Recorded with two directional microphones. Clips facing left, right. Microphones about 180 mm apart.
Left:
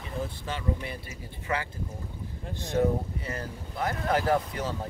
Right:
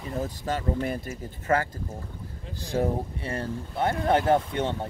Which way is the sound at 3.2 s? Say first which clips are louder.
Right 5 dB; 30° right (ahead or behind).